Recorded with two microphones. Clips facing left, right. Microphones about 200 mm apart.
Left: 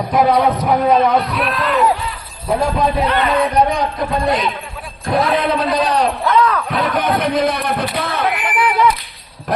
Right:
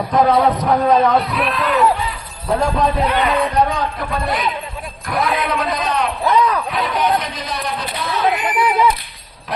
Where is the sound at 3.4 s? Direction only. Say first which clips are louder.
Left 2 dB; 15° left (ahead or behind); by 6.1 s 35° left (ahead or behind).